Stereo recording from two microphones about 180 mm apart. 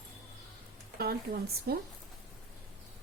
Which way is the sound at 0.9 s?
60° right (ahead or behind).